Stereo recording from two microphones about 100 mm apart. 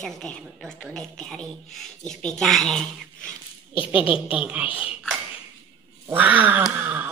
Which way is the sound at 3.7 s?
60° left (ahead or behind).